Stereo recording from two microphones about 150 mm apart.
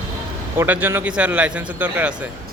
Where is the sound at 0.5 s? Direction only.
15° right (ahead or behind).